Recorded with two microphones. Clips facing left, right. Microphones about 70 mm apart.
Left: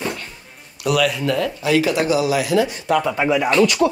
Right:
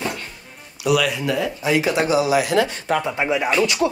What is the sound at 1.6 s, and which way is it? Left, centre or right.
Speech, right.